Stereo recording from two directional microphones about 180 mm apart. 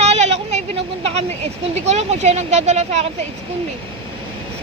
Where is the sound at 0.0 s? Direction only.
35° right (ahead or behind).